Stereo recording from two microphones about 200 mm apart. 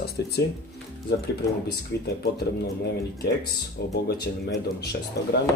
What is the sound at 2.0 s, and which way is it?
Speech, 55° left (ahead or behind).